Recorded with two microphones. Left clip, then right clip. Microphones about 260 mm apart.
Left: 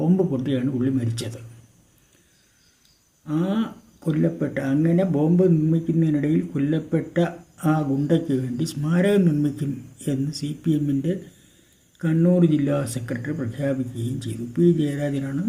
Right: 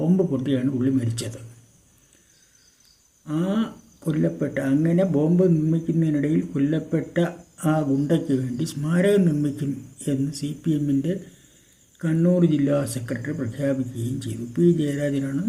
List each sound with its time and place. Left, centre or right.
0.0 s speech: centre
3.2 s speech: centre